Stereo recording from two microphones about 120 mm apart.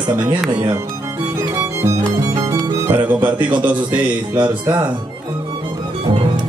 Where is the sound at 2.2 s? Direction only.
25° right (ahead or behind).